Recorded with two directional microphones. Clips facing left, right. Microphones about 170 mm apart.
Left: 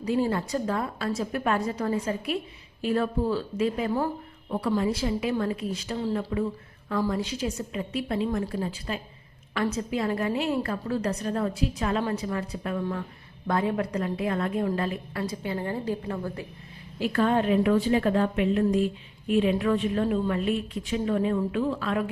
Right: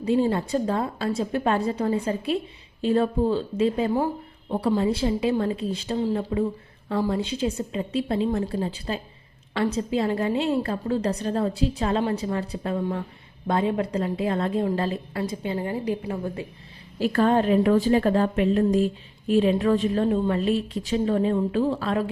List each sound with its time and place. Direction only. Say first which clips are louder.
0.0 s a woman's voice: right 4 dB; 25° right (ahead or behind)
15.2 s a woman's voice: right 2 dB; 20° right (ahead or behind)
17.0 s a woman's voice: right 3 dB; 40° right (ahead or behind)